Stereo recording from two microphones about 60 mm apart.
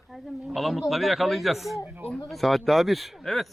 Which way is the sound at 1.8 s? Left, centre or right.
Right.